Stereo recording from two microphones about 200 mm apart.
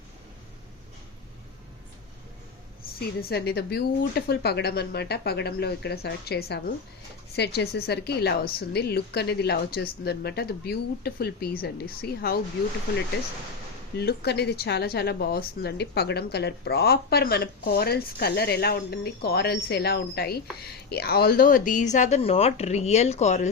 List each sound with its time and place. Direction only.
3.0 s speech: 50° left (ahead or behind)
13.9 s speech: 55° left (ahead or behind); by 23.5 s 35° left (ahead or behind)